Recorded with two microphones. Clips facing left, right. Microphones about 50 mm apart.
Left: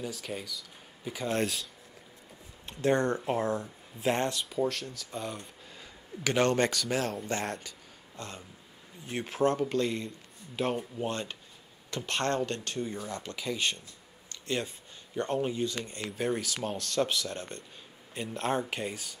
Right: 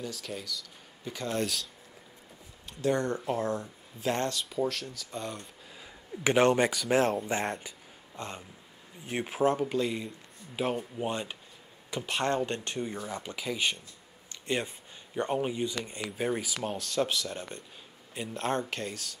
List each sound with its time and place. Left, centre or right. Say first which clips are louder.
0.1 s speech: even; centre
2.6 s speech: left 2 dB; left
4.3 s speech: even; centre
6.2 s speech: right 3 dB; centre
12.4 s speech: right 1 dB; right
14.3 s a sound: right 1 dB; right
15.1 s speech: even; centre